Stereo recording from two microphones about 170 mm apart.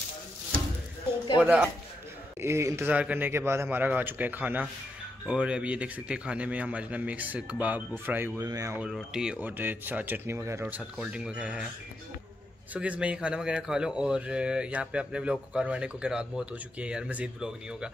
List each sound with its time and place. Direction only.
1.4 s a man's voice: 10° right (ahead or behind)
8.8 s a man's voice: 5° right (ahead or behind)
12.7 s speech: 5° right (ahead or behind)